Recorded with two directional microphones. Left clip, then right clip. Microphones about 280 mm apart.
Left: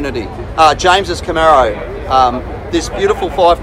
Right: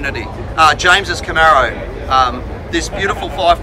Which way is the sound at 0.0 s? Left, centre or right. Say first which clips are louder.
Left 1 dB; centre.